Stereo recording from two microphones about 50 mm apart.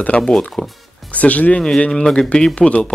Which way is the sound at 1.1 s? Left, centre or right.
Left.